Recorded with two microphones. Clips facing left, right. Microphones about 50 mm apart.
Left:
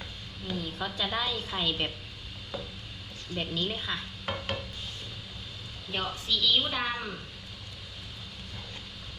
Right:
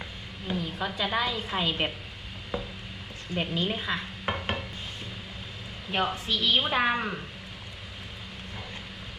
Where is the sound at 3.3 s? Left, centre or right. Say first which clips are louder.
Right 3 dB; right.